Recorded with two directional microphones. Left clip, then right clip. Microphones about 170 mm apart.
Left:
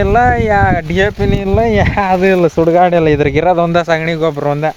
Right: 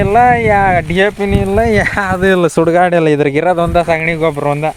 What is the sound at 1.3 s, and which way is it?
Speech, 50° left (ahead or behind).